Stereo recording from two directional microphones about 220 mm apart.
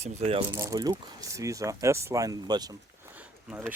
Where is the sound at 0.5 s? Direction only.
15° right (ahead or behind).